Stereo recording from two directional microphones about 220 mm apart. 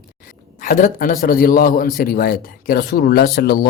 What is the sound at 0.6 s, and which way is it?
A man's voice, 40° left (ahead or behind).